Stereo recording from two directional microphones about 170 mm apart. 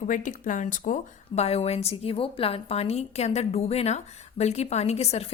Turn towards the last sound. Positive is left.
turn(degrees=40)  # may be behind; listen again after turning